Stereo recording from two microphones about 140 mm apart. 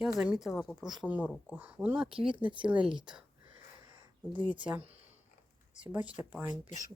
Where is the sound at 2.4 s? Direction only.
35° right (ahead or behind).